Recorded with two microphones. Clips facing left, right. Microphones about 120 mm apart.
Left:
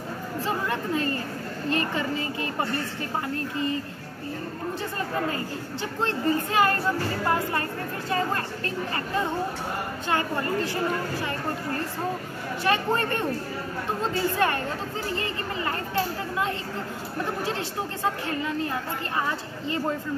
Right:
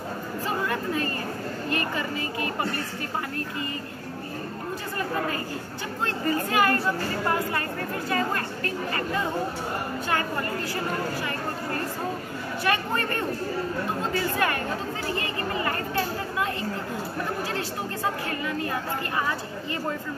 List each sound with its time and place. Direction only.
0.7 s a woman's voice: 25° left (ahead or behind)
6.0 s speech: 25° left (ahead or behind)
10.0 s speech: 25° left (ahead or behind)
12.6 s speech: 20° left (ahead or behind)
14.4 s speech: 25° left (ahead or behind)